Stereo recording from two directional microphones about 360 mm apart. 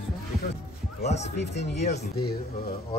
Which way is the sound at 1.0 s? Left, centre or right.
Centre.